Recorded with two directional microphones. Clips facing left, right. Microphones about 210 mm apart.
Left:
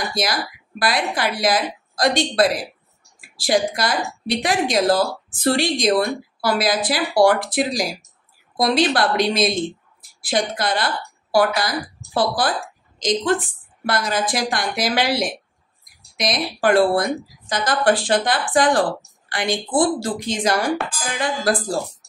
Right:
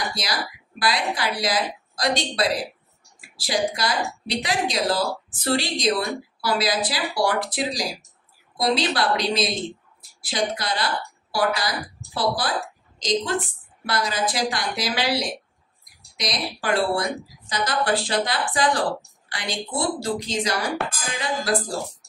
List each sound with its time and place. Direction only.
0.1 s a woman's voice: 50° left (ahead or behind)